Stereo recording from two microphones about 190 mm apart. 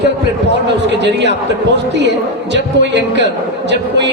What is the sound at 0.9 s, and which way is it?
Speech, 65° right (ahead or behind).